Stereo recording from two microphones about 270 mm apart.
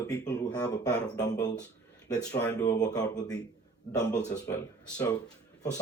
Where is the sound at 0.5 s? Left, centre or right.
Centre.